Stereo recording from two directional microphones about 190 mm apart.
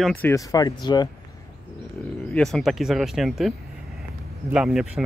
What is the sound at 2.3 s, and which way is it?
Speech, centre (ahead or behind).